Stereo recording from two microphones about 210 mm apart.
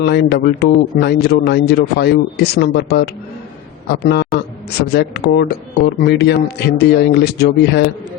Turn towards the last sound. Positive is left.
turn(degrees=50)  # may be behind; listen again after turning